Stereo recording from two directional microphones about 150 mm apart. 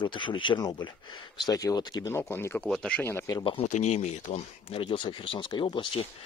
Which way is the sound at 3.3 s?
30° left (ahead or behind).